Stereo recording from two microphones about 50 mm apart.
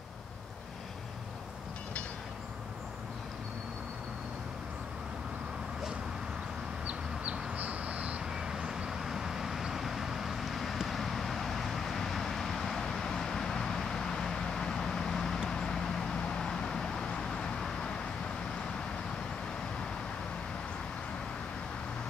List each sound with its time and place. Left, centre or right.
6.9 s bird: right
8.3 s vehicle: centre